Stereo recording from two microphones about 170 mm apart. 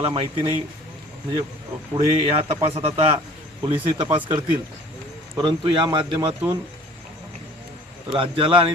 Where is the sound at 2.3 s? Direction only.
35° right (ahead or behind).